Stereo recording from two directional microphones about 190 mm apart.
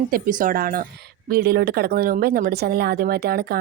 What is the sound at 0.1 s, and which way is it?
Speech, 45° right (ahead or behind).